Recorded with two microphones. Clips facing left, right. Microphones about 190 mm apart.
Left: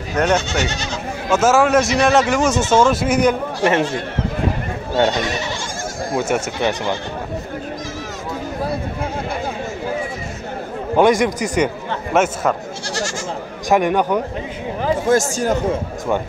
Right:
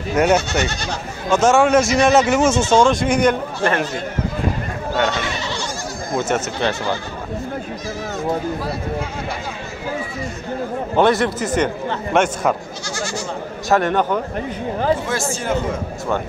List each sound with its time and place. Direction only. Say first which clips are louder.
0.2 s speech: right 2 dB; 10° right (ahead or behind)
1.3 s speech: even; 5° left (ahead or behind)
4.9 s speech: left 4 dB; 35° left (ahead or behind)
6.1 s speech: even; 10° left (ahead or behind)
11.0 s a man's voice: left 2 dB; 15° left (ahead or behind)
13.7 s speech: left 1 dB; 15° left (ahead or behind)
15.0 s speech: left 6 dB; 45° left (ahead or behind)